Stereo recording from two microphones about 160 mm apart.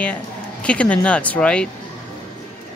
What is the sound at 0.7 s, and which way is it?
Speech, 5° left (ahead or behind).